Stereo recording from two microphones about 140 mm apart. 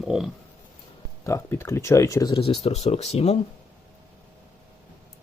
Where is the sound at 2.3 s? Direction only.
45° left (ahead or behind).